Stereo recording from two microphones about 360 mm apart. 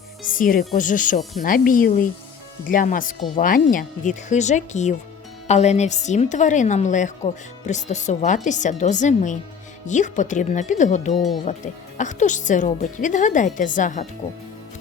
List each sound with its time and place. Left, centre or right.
0.2 s a woman's voice: left